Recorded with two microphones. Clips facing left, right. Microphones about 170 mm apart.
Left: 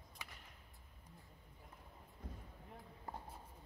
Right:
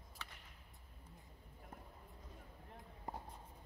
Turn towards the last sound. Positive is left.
turn(degrees=-20)  # may be behind; listen again after turning